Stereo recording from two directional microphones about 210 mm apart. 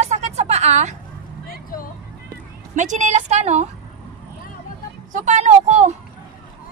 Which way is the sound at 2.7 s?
35° right (ahead or behind).